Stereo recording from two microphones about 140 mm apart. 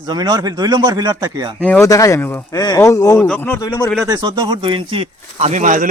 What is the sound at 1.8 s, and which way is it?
Speech, 20° left (ahead or behind).